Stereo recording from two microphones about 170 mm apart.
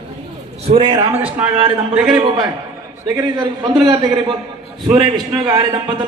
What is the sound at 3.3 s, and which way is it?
A man's voice, 25° right (ahead or behind).